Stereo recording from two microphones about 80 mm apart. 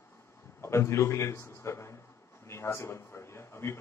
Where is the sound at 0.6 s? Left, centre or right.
Left.